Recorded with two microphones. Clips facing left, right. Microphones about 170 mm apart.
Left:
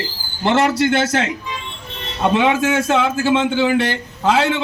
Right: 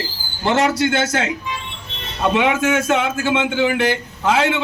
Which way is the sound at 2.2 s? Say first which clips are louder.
Left 1 dB; 35° left (ahead or behind).